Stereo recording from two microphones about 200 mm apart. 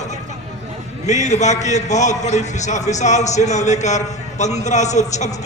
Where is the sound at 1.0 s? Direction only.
35° left (ahead or behind).